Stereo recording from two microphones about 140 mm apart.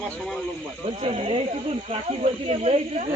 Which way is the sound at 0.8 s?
45° right (ahead or behind).